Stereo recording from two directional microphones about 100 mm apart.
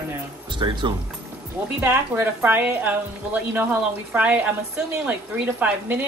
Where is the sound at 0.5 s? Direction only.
50° right (ahead or behind).